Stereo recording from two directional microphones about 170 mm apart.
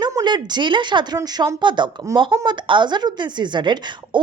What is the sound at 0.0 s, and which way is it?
Speech, 25° right (ahead or behind).